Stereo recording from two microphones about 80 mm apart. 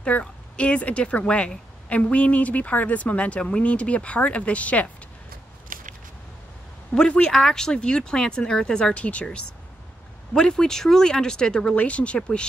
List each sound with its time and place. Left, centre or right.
0.0 s speech: centre
7.0 s speech: centre